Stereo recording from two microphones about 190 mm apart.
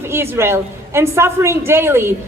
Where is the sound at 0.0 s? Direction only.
10° right (ahead or behind).